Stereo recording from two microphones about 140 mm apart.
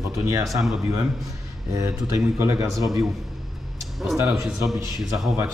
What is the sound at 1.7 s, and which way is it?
A man's voice, 25° right (ahead or behind).